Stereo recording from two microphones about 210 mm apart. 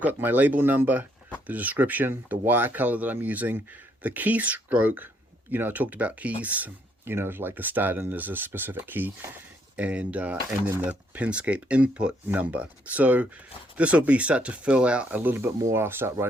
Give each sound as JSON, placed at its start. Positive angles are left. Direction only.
{"t": 0.0, "sound": "speech", "side_deg": -10}